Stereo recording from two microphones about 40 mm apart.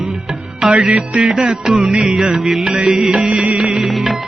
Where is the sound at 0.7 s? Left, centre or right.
Right.